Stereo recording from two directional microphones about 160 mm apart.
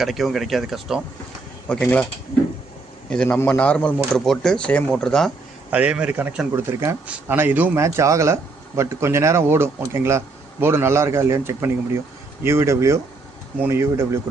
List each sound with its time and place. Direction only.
0.0 s speech: centre (ahead or behind)
3.1 s speech: 10° left (ahead or behind)
5.7 s speech: 5° right (ahead or behind)